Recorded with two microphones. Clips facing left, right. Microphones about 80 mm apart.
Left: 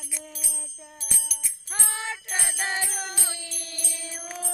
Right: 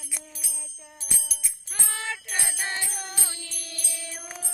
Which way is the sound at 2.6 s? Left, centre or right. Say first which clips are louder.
Left 5 dB; left.